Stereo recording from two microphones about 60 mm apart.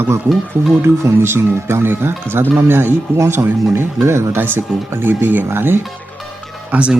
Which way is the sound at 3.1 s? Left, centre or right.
Right.